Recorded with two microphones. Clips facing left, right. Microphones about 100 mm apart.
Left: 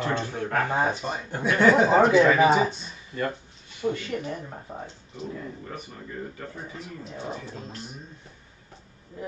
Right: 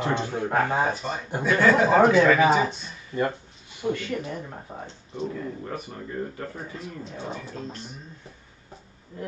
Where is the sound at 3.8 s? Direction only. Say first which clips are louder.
Even; 10° right (ahead or behind).